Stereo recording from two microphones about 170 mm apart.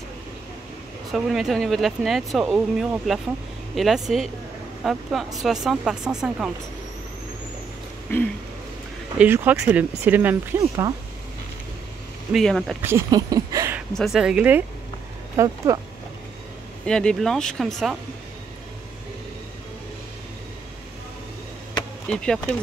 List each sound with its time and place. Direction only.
1.1 s speech: centre (ahead or behind)
9.2 s speech: 10° right (ahead or behind)
12.3 s speech: centre (ahead or behind)
12.8 s speech: 20° right (ahead or behind)
13.9 s speech: centre (ahead or behind)
15.3 s speech: 20° right (ahead or behind)
16.8 s speech: 5° left (ahead or behind)
22.0 s speech: 5° left (ahead or behind)